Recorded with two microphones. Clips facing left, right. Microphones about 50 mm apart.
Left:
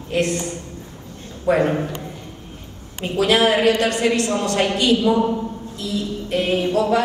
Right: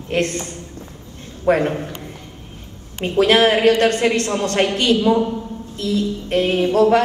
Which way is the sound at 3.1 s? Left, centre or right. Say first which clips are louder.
Right 2 dB; right.